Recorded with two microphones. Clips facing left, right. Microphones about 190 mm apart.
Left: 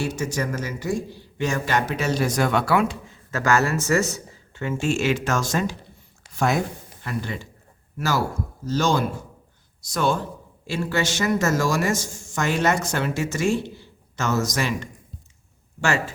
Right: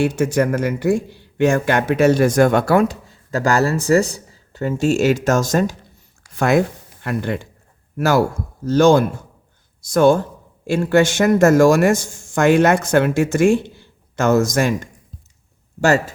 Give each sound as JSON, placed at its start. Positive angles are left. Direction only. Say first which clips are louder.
{"t": 0.0, "sound": "speech", "louder": "right 9 dB", "side_deg": -60}
{"t": 6.3, "sound": "speech", "louder": "right 7 dB", "side_deg": -60}